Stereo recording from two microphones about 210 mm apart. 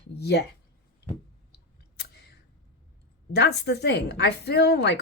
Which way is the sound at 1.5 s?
50° left (ahead or behind).